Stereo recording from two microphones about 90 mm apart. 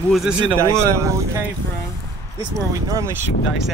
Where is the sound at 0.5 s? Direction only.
35° right (ahead or behind).